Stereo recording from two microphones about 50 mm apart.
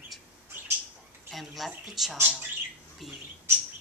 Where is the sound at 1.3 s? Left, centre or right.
Centre.